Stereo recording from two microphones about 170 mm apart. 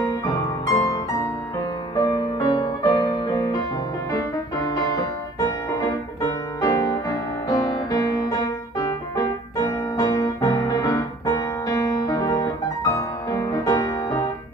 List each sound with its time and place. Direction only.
0.1 s music: 20° left (ahead or behind)
2.0 s music: 20° left (ahead or behind)
6.6 s music: 20° left (ahead or behind)